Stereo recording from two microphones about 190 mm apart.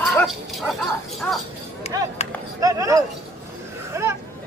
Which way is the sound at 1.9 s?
20° right (ahead or behind).